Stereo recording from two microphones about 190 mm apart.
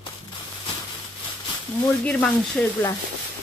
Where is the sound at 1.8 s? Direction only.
10° left (ahead or behind).